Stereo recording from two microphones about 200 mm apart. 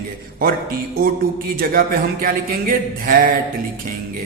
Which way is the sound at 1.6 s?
45° right (ahead or behind).